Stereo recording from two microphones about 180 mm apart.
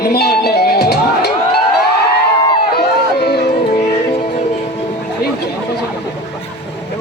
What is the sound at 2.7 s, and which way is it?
Run, 65° left (ahead or behind).